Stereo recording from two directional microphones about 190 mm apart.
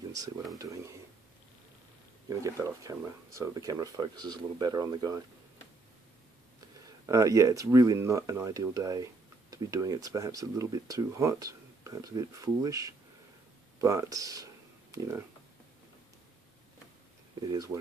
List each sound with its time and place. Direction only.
0.6 s speech: 15° right (ahead or behind)
2.2 s speech: 15° right (ahead or behind)
7.1 s speech: 15° right (ahead or behind)
17.4 s speech: 20° right (ahead or behind)